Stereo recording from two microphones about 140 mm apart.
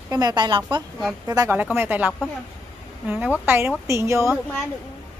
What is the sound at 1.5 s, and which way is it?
A man's voice, 15° right (ahead or behind).